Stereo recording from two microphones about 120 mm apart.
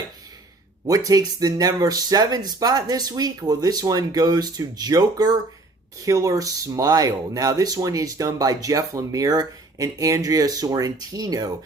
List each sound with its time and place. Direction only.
0.9 s speech: 30° right (ahead or behind)